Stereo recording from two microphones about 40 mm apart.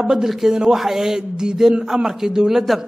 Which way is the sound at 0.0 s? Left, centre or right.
Centre.